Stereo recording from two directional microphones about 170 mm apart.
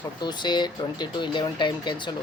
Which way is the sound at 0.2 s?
25° left (ahead or behind).